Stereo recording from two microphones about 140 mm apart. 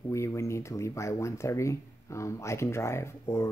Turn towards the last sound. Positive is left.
turn(degrees=20)  # may be behind; listen again after turning